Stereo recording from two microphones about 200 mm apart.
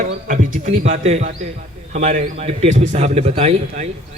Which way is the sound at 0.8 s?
35° right (ahead or behind).